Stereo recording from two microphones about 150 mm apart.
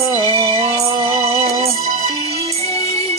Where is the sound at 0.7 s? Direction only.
25° right (ahead or behind).